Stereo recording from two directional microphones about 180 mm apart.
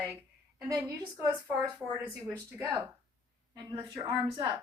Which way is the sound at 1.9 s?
10° right (ahead or behind).